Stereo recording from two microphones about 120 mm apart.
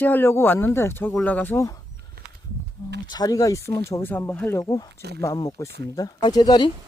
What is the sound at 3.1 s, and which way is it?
Speech, 30° left (ahead or behind).